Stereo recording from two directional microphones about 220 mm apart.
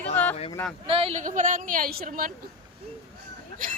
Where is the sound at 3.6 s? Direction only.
40° right (ahead or behind).